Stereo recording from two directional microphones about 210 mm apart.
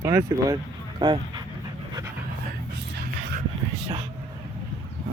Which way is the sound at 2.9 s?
50° right (ahead or behind).